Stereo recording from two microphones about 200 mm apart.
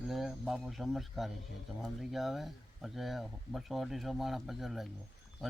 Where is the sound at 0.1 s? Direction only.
Centre (ahead or behind).